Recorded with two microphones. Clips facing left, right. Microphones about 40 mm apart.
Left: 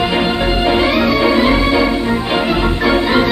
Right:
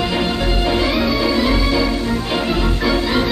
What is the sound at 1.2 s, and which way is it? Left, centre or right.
Music, left.